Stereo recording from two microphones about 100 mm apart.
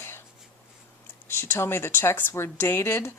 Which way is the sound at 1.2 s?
25° left (ahead or behind).